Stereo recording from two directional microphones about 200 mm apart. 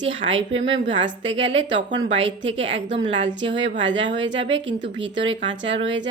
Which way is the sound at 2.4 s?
70° right (ahead or behind).